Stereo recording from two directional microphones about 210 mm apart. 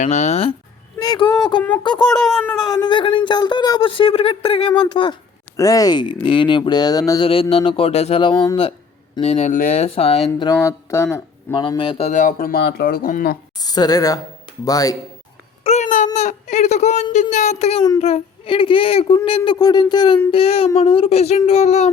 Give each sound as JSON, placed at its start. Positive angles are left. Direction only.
{"t": 0.0, "sound": "speech", "side_deg": 35}
{"t": 13.6, "sound": "speech", "side_deg": 20}
{"t": 15.6, "sound": "a sound", "side_deg": 35}
{"t": 16.1, "sound": "speech", "side_deg": 35}
{"t": 20.3, "sound": "speech", "side_deg": 30}